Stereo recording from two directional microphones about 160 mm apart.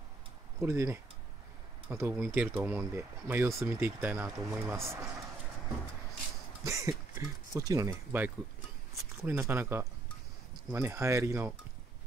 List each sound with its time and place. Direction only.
0.6 s speech: 15° right (ahead or behind)
6.6 s speech: 20° right (ahead or behind)